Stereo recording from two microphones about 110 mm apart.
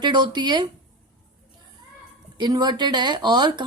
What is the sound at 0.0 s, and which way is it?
Speech, 40° right (ahead or behind).